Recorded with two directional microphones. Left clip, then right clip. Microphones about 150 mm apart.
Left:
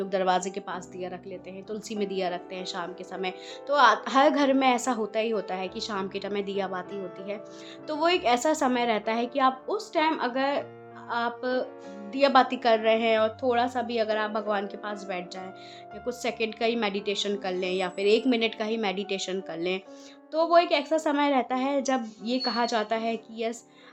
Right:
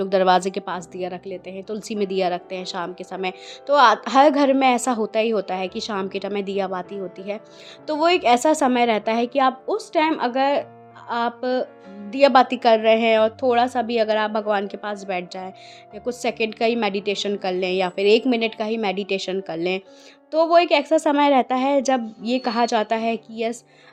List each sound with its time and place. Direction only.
0.0 s a woman's voice: 60° right (ahead or behind)
18.3 s a woman's voice: 35° right (ahead or behind)